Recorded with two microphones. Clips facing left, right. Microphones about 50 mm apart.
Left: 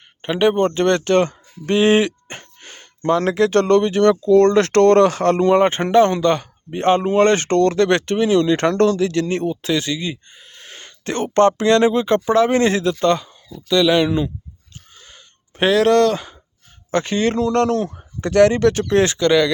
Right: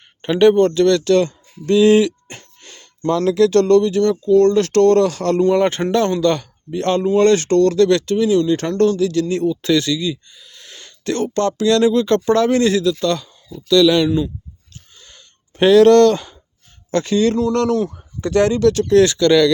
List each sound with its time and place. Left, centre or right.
0.2 s speech: centre
0.6 s speech: left
4.1 s speech: left
4.4 s speech: left
5.5 s speech: left
8.4 s speech: left
9.6 s speech: centre
9.8 s speech: left
12.0 s speech: centre
12.5 s speech: left
14.9 s a sound: centre
16.9 s speech: left
18.7 s speech: left; by 19.5 s centre